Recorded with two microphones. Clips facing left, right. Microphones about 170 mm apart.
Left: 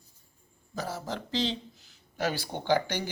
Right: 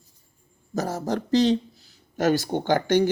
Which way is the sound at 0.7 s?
45° right (ahead or behind).